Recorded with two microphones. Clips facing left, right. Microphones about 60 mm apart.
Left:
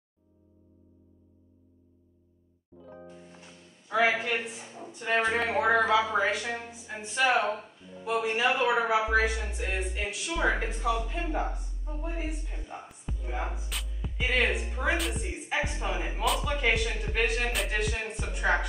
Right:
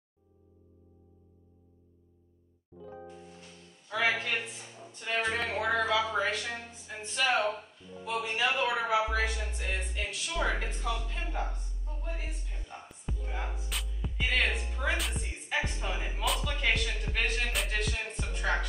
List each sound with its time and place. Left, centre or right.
2.8 s music: centre
3.9 s a sound: centre
4.9 s speech: left
12.8 s music: centre
15.0 s speech: centre
15.2 s music: centre
16.4 s speech: centre
17.6 s music: centre